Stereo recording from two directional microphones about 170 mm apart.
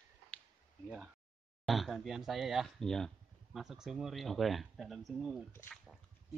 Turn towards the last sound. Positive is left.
turn(degrees=0)  # may be behind; listen again after turning